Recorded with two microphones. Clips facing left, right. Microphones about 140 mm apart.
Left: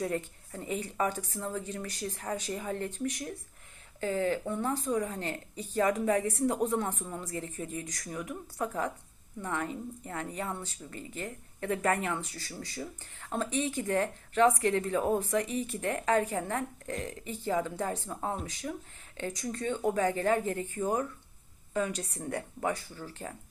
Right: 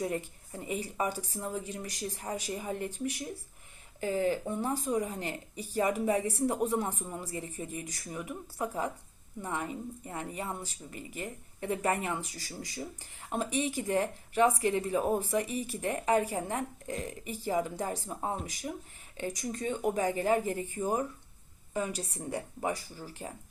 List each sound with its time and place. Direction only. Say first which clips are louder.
0.0 s speech: left 1 dB; 15° right (ahead or behind)
23.0 s speech: left 1 dB; 10° right (ahead or behind)